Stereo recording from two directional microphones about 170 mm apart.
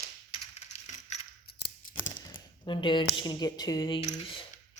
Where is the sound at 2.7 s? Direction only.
30° left (ahead or behind).